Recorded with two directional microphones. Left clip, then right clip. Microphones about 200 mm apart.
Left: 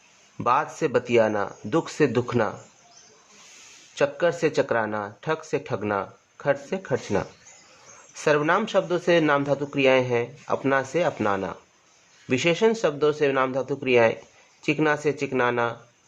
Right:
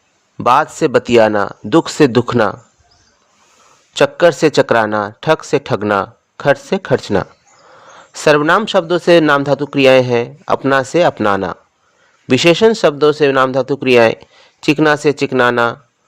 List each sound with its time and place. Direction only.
0.3 s speech: 40° right (ahead or behind)
3.9 s speech: 45° right (ahead or behind)